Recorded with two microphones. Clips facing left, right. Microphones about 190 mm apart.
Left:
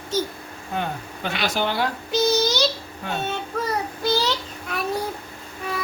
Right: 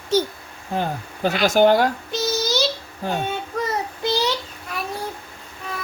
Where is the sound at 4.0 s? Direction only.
20° right (ahead or behind).